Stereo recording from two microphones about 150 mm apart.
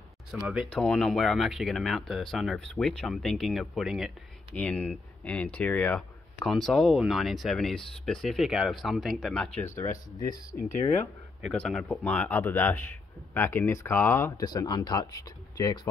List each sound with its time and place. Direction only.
0.3 s speech: 10° right (ahead or behind)
0.7 s speech: 5° left (ahead or behind)
4.6 s speech: 10° left (ahead or behind)
9.8 s speech: 25° left (ahead or behind)
11.4 s speech: 5° left (ahead or behind); by 15.9 s 25° left (ahead or behind)